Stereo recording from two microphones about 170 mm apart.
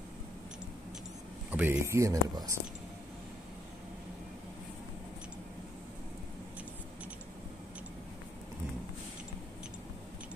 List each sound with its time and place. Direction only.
1.5 s speech: 10° right (ahead or behind)